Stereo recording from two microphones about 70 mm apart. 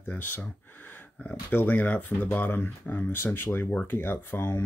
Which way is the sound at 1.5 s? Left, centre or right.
Left.